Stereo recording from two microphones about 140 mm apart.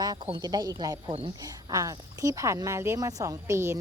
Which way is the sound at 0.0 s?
30° right (ahead or behind).